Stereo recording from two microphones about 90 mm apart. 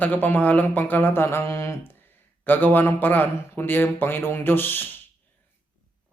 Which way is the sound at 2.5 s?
20° left (ahead or behind).